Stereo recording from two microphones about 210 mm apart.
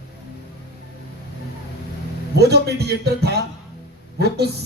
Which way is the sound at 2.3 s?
50° right (ahead or behind).